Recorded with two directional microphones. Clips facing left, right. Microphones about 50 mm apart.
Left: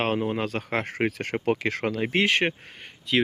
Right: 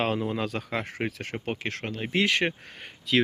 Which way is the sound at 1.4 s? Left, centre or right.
Left.